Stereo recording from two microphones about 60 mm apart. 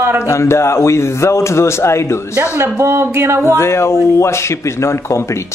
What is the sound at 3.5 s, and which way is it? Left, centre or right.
A man's voice, left.